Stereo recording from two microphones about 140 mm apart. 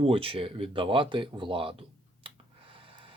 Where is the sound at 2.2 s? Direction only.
40° right (ahead or behind).